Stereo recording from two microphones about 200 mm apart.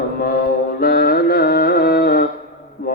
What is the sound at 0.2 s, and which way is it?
Carnatic music, 50° left (ahead or behind).